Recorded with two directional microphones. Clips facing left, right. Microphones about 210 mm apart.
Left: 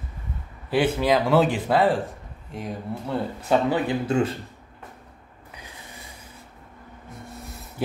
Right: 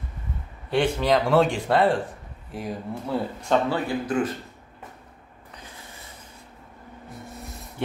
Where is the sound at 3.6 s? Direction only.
20° left (ahead or behind).